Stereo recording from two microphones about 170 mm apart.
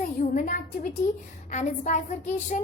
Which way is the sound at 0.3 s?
55° left (ahead or behind).